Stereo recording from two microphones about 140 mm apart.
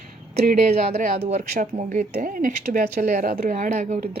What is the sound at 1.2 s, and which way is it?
Speech, 50° right (ahead or behind).